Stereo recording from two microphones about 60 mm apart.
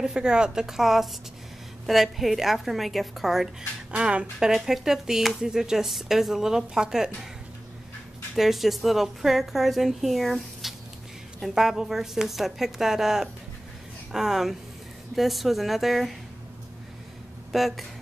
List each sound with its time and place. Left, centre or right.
0.0 s a woman's voice: centre
3.9 s speech: centre
4.5 s speech: centre
8.4 s a woman's voice: centre
17.5 s speech: centre